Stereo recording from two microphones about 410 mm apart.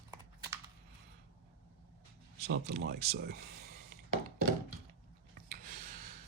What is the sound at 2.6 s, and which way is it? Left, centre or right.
Speech, right.